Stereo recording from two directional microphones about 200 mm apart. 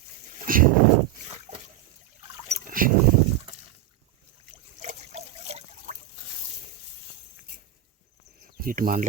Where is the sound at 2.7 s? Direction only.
45° right (ahead or behind).